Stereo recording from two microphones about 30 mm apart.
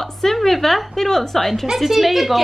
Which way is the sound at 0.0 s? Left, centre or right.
Centre.